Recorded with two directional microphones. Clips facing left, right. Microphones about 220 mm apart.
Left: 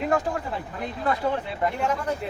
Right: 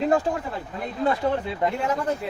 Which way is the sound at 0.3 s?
25° right (ahead or behind).